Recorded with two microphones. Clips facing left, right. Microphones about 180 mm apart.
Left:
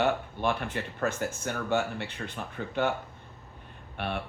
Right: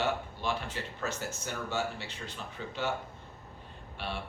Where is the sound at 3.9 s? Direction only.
60° left (ahead or behind).